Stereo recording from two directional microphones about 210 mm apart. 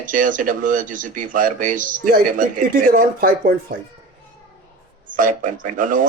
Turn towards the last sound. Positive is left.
turn(degrees=-40)  # may be behind; listen again after turning